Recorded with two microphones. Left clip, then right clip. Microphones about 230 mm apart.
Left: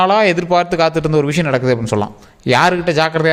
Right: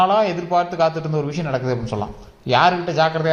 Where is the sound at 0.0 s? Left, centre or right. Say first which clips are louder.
Left 4 dB; left.